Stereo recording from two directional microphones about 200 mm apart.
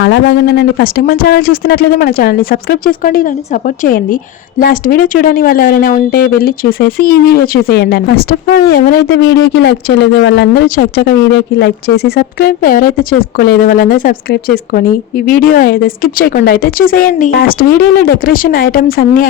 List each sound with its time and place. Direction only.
0.0 s speech: 55° left (ahead or behind)
4.6 s speech: 45° left (ahead or behind)